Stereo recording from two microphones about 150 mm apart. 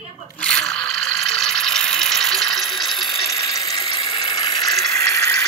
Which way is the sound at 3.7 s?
25° left (ahead or behind).